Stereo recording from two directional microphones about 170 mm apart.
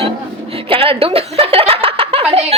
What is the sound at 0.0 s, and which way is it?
Chuckle, 35° right (ahead or behind).